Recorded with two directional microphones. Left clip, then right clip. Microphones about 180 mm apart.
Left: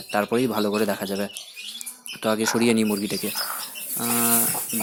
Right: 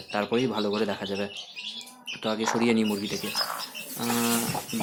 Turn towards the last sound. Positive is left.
turn(degrees=30)  # may be behind; listen again after turning